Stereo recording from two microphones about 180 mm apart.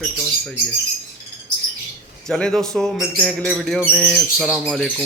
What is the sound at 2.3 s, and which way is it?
Bird, 5° left (ahead or behind).